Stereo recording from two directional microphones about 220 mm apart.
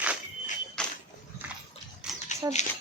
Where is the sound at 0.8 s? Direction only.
5° left (ahead or behind).